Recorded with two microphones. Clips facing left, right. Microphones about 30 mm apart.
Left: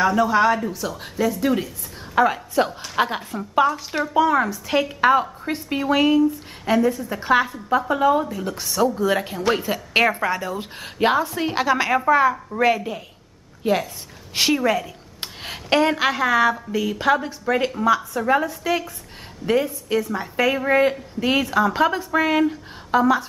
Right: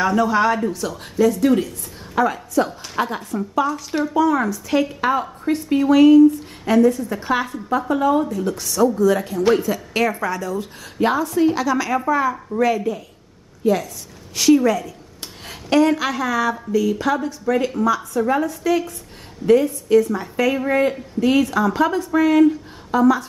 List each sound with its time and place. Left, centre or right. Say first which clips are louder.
0.0 s a woman's voice: even; centre
2.1 s a woman's voice: left 1 dB; centre
2.5 s a woman's voice: even; left
13.6 s a woman's voice: right 2 dB; left
14.5 s a woman's voice: right 8 dB; left